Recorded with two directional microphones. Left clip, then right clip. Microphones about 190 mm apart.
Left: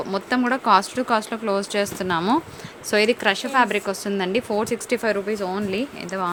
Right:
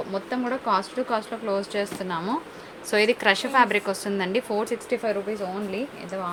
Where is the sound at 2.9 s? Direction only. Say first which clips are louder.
Left 1 dB; 20° left (ahead or behind).